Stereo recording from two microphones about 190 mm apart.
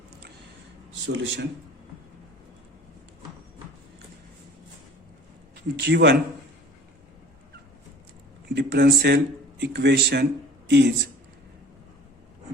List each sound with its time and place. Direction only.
1.0 s speech: 65° right (ahead or behind)
5.8 s speech: 65° right (ahead or behind)
8.5 s speech: 60° right (ahead or behind)